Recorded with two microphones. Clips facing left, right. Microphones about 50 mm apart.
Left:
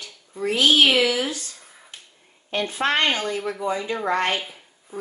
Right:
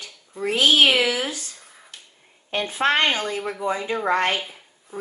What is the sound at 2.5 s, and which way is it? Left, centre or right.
A woman's voice, right.